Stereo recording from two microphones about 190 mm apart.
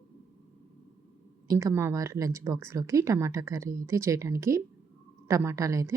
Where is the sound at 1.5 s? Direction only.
15° right (ahead or behind).